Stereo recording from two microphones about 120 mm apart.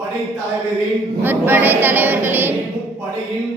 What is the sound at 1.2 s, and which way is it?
A woman's voice, 15° right (ahead or behind).